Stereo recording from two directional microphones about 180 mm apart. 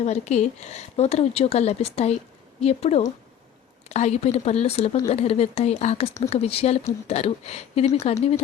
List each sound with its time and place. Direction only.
0.0 s speech: 40° left (ahead or behind)